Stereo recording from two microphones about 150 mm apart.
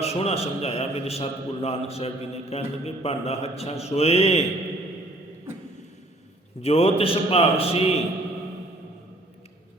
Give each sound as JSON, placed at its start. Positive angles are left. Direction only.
{"t": 0.0, "sound": "a man's voice", "side_deg": 45}
{"t": 6.6, "sound": "a man's voice", "side_deg": 40}